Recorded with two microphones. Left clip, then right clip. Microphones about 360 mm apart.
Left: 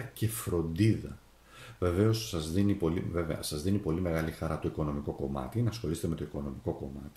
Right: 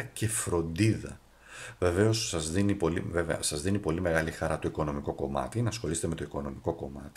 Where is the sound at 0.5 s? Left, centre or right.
Right.